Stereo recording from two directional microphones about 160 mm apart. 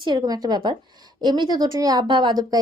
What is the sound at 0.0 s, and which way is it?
A woman's voice, 25° right (ahead or behind).